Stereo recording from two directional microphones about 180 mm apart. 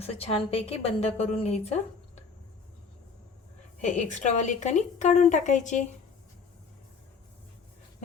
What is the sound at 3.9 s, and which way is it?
A woman's voice, 40° left (ahead or behind).